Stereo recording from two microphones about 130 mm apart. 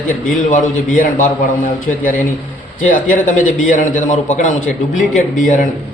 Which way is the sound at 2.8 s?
90° left.